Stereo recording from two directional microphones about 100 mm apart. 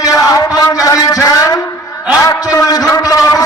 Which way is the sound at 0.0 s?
35° left (ahead or behind).